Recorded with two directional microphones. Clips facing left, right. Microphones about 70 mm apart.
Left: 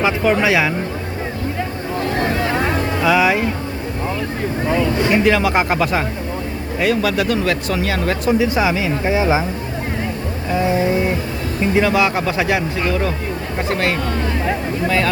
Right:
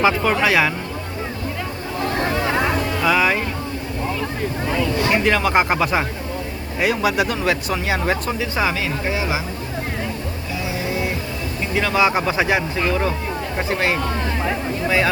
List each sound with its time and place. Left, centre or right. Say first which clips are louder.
0.3 s speech: left 1 dB; centre
3.0 s speech: left 3 dB; centre
5.1 s speech: left 2 dB; centre
8.2 s speech: left 6 dB; centre
9.0 s speech: left 8 dB; left
10.6 s a sound: left 8 dB; left
11.7 s speech: left 6 dB; centre
11.9 s speech: left 1 dB; centre